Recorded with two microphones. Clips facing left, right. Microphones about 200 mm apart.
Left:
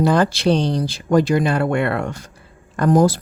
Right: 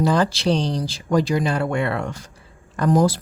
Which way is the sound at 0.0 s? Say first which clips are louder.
Left 3 dB; 60° left (ahead or behind).